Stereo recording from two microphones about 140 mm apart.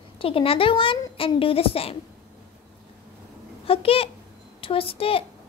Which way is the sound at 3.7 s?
45° left (ahead or behind).